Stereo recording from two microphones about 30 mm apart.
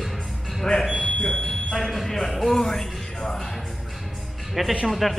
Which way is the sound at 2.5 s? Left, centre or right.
Centre.